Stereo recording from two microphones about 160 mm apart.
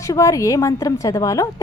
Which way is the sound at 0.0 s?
20° left (ahead or behind).